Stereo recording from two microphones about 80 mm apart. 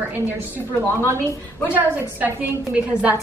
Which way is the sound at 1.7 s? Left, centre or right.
Right.